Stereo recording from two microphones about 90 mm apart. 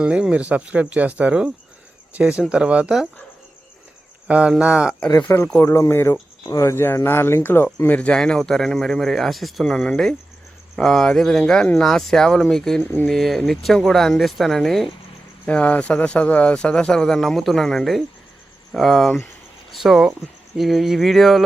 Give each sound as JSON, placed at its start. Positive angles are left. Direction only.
{"t": 0.0, "sound": "speech", "side_deg": -10}
{"t": 2.5, "sound": "speech", "side_deg": -10}
{"t": 4.3, "sound": "speech", "side_deg": -15}
{"t": 5.1, "sound": "speech", "side_deg": 30}
{"t": 12.8, "sound": "speech", "side_deg": 20}
{"t": 13.1, "sound": "speech", "side_deg": 5}
{"t": 15.4, "sound": "speech", "side_deg": 15}